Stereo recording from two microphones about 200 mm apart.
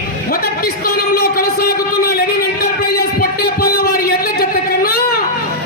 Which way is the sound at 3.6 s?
50° left (ahead or behind).